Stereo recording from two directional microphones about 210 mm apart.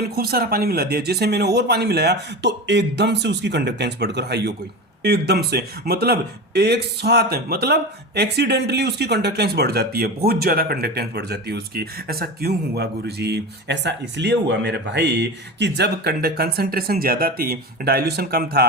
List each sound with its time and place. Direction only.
0.0 s speech: 45° right (ahead or behind)